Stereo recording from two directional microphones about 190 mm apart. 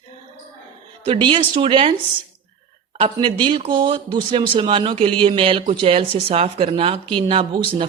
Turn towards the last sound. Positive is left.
turn(degrees=-30)  # may be behind; listen again after turning